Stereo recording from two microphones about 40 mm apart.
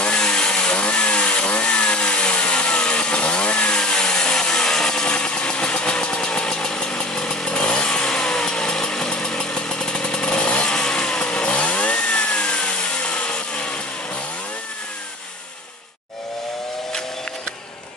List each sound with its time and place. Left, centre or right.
0.0 s chainsaw: left